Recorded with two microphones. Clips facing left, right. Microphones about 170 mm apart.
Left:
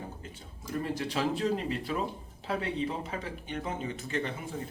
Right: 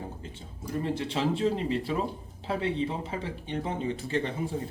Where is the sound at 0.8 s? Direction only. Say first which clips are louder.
Right 2 dB; 25° right (ahead or behind).